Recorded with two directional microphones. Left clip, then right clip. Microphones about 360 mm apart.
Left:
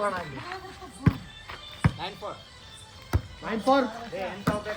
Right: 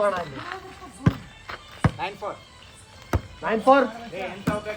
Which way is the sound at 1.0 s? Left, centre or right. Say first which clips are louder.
Right 2 dB; right.